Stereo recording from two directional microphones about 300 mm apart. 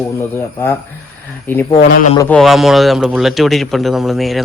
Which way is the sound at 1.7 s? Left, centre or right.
Left.